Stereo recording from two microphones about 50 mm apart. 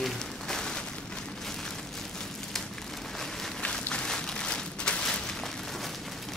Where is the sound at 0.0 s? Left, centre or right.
Centre.